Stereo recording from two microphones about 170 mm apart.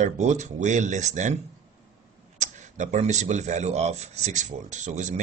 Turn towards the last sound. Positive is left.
turn(degrees=-45)  # may be behind; listen again after turning